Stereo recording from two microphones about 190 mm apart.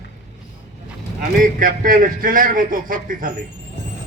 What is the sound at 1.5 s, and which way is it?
A man's voice, 50° right (ahead or behind).